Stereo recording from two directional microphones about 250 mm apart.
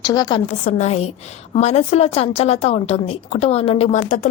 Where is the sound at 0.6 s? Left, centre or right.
Left.